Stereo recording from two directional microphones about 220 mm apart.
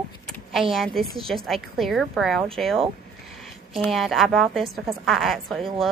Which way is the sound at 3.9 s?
Centre (ahead or behind).